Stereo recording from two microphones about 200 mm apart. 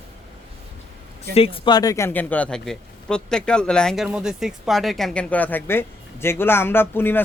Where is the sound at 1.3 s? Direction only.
30° left (ahead or behind).